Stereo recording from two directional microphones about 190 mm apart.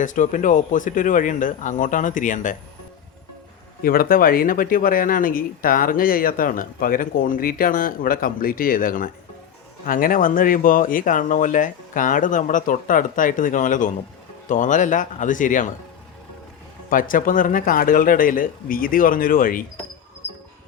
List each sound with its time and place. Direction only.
0.0 s speech: 40° left (ahead or behind)
3.8 s speech: 50° left (ahead or behind)
16.9 s speech: 45° left (ahead or behind)